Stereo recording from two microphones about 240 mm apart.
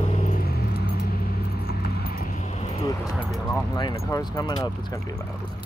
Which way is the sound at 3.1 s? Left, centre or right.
Centre.